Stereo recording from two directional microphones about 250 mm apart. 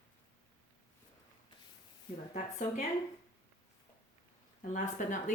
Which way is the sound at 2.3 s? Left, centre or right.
Left.